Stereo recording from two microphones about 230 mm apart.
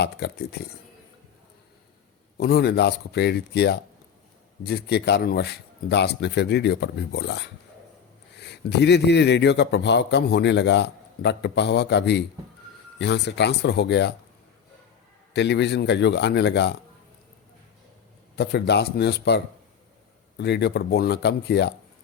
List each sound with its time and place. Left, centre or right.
0.0 s a man's voice: left
2.4 s a man's voice: left
15.3 s a man's voice: left
18.3 s a man's voice: left
20.4 s a man's voice: left